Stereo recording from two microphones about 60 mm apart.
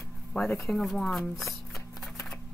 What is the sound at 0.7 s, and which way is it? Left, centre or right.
Speech, centre.